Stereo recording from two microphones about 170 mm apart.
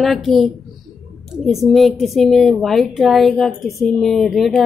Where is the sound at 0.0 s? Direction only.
Centre (ahead or behind).